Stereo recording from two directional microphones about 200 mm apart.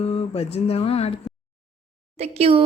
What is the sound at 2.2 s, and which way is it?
Speech, 30° right (ahead or behind).